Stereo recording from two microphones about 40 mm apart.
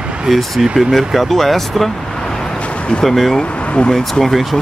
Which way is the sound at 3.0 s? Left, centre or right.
Centre.